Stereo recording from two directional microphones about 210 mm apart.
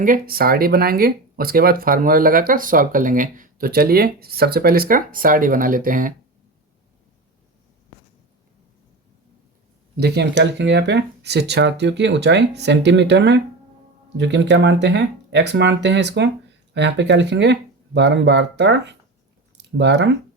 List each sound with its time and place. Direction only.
0.0 s speech: 40° right (ahead or behind)
10.0 s speech: 55° right (ahead or behind)